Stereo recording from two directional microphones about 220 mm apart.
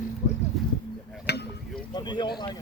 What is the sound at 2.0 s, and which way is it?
Speech, 20° left (ahead or behind).